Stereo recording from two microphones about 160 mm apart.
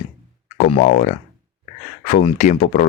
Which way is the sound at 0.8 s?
50° left (ahead or behind).